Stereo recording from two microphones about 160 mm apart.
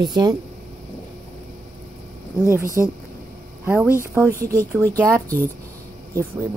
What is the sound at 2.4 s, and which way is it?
Speech, 15° right (ahead or behind).